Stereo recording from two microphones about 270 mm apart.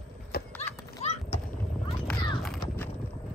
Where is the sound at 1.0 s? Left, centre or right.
Left.